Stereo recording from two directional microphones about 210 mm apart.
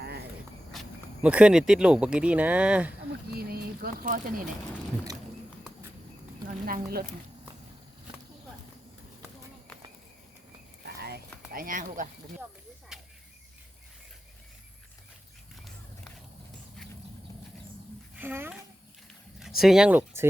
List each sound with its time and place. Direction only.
0.7 s speech: 5° right (ahead or behind)
3.3 s speech: 45° right (ahead or behind)
6.5 s speech: 40° right (ahead or behind)
10.8 s a sound: 50° right (ahead or behind)
11.5 s speech: 40° right (ahead or behind)
12.9 s cricket: 5° right (ahead or behind)
18.2 s speech: 10° right (ahead or behind)